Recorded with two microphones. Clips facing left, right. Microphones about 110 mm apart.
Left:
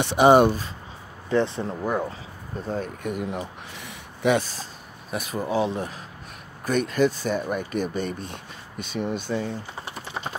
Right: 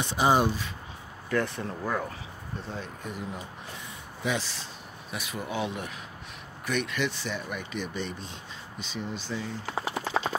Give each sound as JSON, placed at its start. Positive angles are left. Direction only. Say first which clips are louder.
{"t": 0.0, "sound": "speech", "louder": "left 8 dB", "side_deg": 65}
{"t": 1.3, "sound": "speech", "louder": "left 6 dB", "side_deg": 25}
{"t": 2.7, "sound": "speech", "louder": "left 11 dB", "side_deg": 55}
{"t": 5.1, "sound": "speech", "louder": "left 8 dB", "side_deg": 40}
{"t": 9.7, "sound": "speech", "louder": "right 5 dB", "side_deg": -90}